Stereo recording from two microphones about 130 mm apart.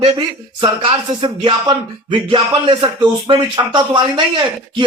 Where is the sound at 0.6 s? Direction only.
40° right (ahead or behind).